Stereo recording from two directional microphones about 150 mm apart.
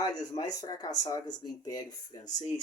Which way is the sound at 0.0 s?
25° left (ahead or behind).